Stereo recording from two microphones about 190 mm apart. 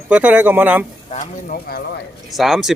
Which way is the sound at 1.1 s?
45° left (ahead or behind).